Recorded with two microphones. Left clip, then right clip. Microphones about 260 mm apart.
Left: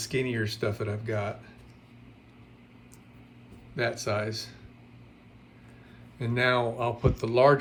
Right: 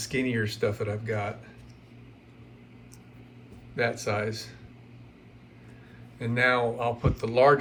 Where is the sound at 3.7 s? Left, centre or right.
Centre.